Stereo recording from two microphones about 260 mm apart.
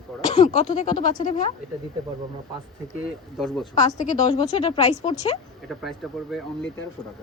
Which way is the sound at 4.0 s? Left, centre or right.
Left.